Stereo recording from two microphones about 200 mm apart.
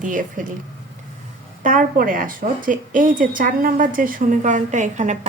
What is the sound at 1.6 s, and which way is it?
A woman's voice, 40° right (ahead or behind).